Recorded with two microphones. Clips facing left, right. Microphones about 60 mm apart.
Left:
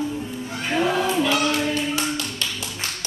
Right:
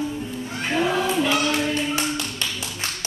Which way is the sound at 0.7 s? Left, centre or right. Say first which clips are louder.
Left 1 dB; centre.